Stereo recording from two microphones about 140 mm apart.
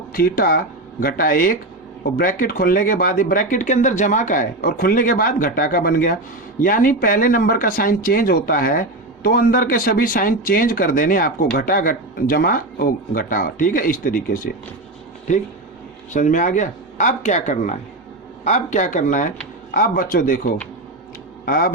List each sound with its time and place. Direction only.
0.1 s speech: 90° left
16.1 s speech: 65° left (ahead or behind); by 20.6 s 80° left
21.4 s speech: 90° left